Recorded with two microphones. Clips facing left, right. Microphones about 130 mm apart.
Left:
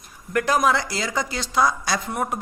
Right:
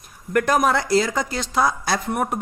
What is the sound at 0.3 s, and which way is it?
Speech, 50° right (ahead or behind).